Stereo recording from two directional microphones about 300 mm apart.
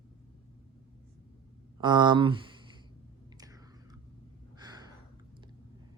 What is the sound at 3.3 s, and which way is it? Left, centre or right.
Whispering, centre.